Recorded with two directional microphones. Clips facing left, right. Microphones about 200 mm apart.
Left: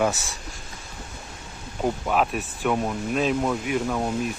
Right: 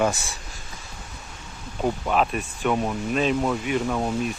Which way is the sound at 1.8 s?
5° left (ahead or behind).